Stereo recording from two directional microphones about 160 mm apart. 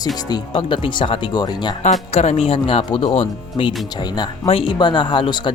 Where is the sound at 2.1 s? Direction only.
40° left (ahead or behind).